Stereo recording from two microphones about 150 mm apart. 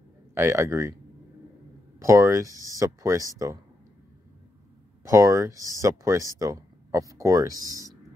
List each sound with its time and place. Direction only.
0.3 s speech: 15° right (ahead or behind)
2.0 s speech: 20° right (ahead or behind)
5.0 s speech: 20° right (ahead or behind)